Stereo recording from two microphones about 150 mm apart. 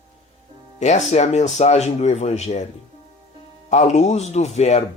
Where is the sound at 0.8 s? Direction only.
50° left (ahead or behind).